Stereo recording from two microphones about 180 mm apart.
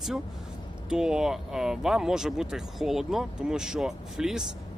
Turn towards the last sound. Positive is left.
turn(degrees=-5)  # may be behind; listen again after turning